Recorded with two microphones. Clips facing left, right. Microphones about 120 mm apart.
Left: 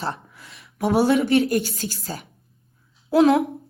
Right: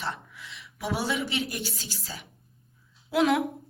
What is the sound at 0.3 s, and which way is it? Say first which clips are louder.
A woman's voice: left 10 dB; 45° left (ahead or behind).